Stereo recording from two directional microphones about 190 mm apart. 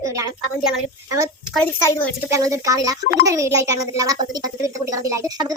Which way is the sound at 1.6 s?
10° left (ahead or behind).